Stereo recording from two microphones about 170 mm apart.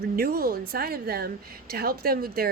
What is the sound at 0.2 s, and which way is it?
Speech, 60° right (ahead or behind).